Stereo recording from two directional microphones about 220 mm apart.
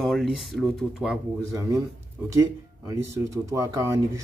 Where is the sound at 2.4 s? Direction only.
15° right (ahead or behind).